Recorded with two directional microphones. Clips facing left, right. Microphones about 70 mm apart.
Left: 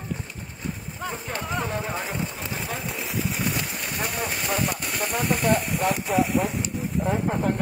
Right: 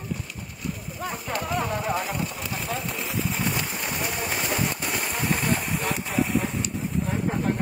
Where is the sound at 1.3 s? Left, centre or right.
Left.